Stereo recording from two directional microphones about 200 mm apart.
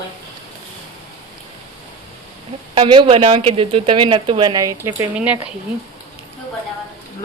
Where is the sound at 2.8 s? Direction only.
25° right (ahead or behind); by 5.5 s 5° right (ahead or behind).